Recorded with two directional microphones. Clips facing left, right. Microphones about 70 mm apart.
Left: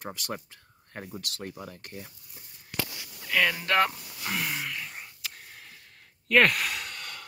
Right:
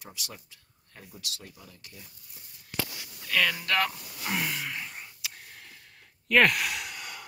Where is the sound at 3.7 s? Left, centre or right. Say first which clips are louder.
Left 3 dB; left.